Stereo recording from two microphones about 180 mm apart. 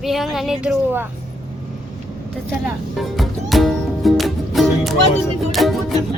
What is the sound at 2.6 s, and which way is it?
Music, centre (ahead or behind).